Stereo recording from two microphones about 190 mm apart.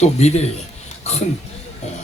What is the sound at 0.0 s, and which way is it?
Speech, 35° left (ahead or behind).